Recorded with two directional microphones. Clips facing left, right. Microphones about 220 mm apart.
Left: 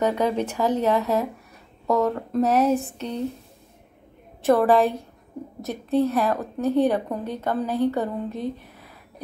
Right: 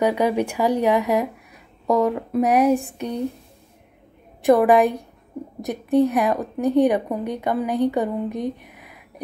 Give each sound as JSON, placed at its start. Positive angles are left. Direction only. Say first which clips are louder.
{"t": 0.0, "sound": "a woman's voice", "louder": "right 3 dB", "side_deg": -10}
{"t": 4.4, "sound": "a woman's voice", "louder": "right 3 dB", "side_deg": -15}